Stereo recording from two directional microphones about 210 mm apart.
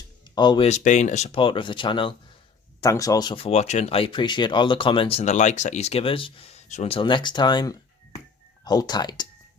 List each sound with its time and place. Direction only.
0.3 s speech: 20° left (ahead or behind)
0.7 s speech: 35° left (ahead or behind); by 9.2 s 20° left (ahead or behind)